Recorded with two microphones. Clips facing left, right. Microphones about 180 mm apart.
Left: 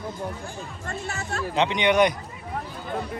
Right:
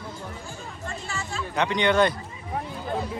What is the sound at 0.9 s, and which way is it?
Music, 60° left (ahead or behind).